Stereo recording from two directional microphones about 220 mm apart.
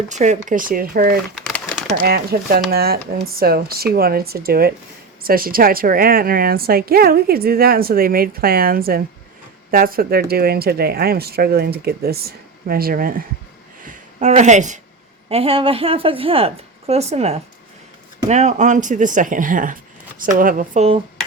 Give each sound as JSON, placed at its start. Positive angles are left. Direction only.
{"t": 0.1, "sound": "a woman's voice", "side_deg": -35}
{"t": 1.5, "sound": "pigeon", "side_deg": 5}
{"t": 2.0, "sound": "a woman's voice", "side_deg": -45}